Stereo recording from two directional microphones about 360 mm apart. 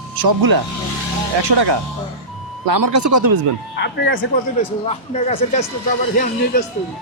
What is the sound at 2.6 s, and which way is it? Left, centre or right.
Speech, right.